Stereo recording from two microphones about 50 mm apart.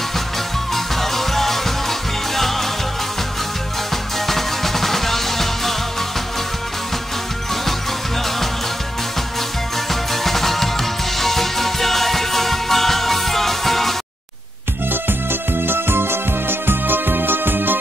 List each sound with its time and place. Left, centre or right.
1.1 s music: centre
4.3 s music: centre
10.2 s music: centre
15.6 s music: right